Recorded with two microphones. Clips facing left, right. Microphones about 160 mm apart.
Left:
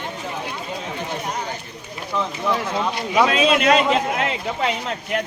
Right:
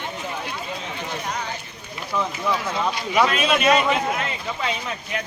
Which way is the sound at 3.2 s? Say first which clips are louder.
Left 4 dB; 90° left.